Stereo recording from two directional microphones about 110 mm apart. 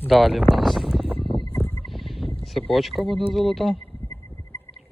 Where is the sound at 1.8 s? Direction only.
Centre (ahead or behind).